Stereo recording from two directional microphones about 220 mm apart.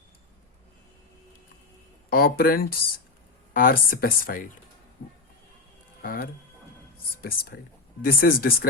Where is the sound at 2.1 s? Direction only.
45° left (ahead or behind).